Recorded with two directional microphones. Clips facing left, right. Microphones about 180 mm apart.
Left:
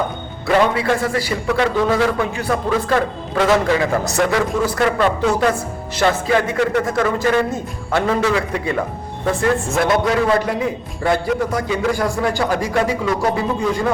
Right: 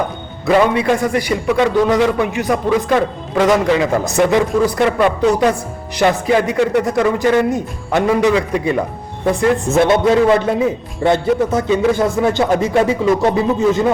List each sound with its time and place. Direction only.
0.4 s a man's voice: 20° right (ahead or behind)